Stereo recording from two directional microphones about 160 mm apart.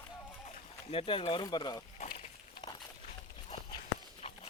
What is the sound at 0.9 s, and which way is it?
Speech, 35° left (ahead or behind).